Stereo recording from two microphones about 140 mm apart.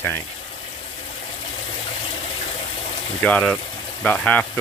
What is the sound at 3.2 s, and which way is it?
Speech, 10° left (ahead or behind).